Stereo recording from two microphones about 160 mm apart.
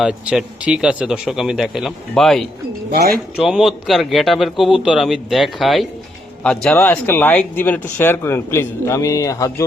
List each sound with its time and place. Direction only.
0.0 s speech: 5° right (ahead or behind)
2.9 s speech: 70° right (ahead or behind)
3.4 s speech: centre (ahead or behind); by 9.6 s 20° left (ahead or behind)